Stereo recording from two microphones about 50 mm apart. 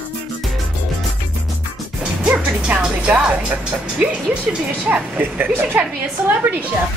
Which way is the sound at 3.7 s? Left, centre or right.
Right.